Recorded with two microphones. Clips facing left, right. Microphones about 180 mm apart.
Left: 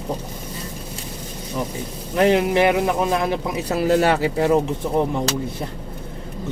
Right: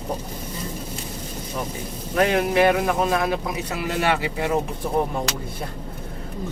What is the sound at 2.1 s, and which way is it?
Speech, 25° left (ahead or behind).